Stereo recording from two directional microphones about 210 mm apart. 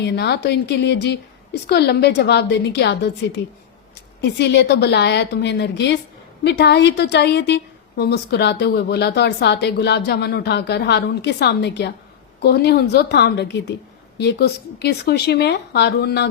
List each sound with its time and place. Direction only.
0.0 s a woman's voice: 50° left (ahead or behind)